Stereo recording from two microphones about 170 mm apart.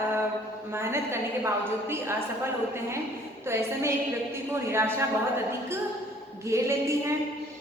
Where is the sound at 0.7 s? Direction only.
15° right (ahead or behind).